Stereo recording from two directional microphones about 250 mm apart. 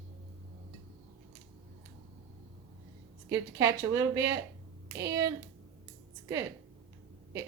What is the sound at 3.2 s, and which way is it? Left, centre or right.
Speech, centre.